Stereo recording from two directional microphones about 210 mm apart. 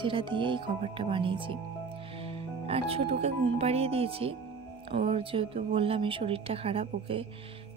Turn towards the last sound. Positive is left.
turn(degrees=-25)  # may be behind; listen again after turning